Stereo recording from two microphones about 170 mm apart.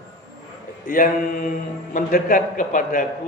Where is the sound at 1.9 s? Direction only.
50° left (ahead or behind).